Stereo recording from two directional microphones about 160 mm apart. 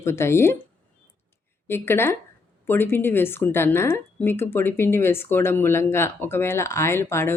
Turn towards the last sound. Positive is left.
turn(degrees=15)  # may be behind; listen again after turning